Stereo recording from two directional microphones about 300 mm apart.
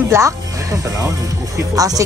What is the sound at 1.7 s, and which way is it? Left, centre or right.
Speech, centre.